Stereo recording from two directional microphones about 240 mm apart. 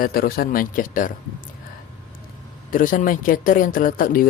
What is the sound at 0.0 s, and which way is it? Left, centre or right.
Speech, left.